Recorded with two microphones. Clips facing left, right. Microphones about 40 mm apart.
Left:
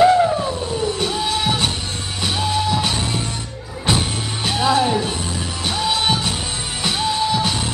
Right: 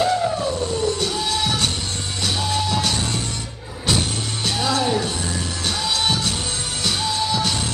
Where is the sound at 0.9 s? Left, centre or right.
Centre.